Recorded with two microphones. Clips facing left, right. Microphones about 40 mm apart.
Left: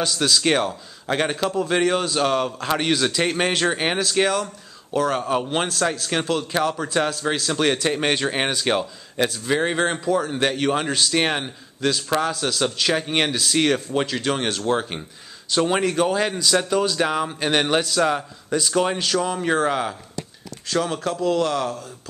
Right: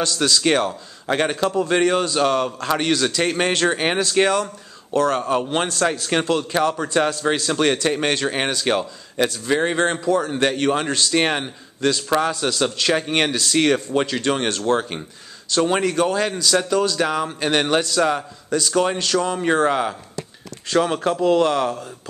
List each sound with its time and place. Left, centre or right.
0.0 s a man's voice: centre